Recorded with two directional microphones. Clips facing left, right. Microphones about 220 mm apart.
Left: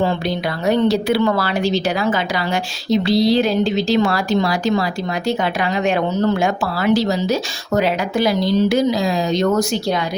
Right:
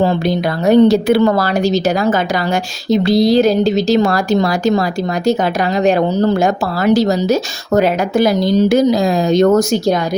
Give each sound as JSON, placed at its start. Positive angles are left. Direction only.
{"t": 0.6, "sound": "speech", "side_deg": -45}
{"t": 5.8, "sound": "speech", "side_deg": -35}